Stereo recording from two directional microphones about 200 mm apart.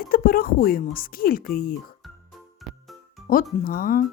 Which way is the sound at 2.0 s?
Centre (ahead or behind).